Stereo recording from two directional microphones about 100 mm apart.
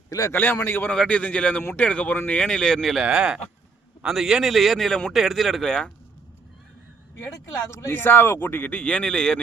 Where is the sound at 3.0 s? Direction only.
10° right (ahead or behind).